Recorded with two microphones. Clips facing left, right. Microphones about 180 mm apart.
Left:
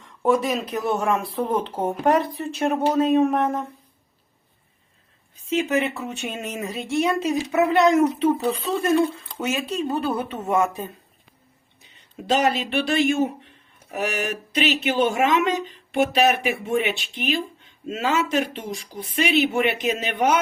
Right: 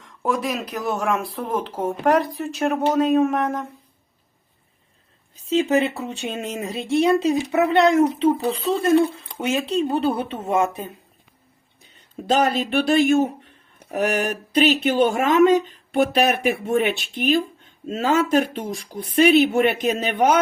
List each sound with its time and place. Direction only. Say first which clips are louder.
0.0 s speech: left 3 dB; centre (ahead or behind)
5.5 s speech: right 3 dB; 35° right (ahead or behind)
9.4 s speech: right 4 dB; 30° right (ahead or behind)
12.3 s speech: right 2 dB; 50° right (ahead or behind)